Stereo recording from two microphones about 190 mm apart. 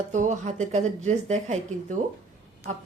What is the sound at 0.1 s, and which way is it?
Speech, 40° right (ahead or behind).